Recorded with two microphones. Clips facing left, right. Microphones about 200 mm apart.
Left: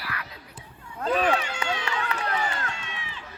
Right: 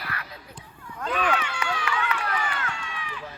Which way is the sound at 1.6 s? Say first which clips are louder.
Right 1 dB; 25° left (ahead or behind).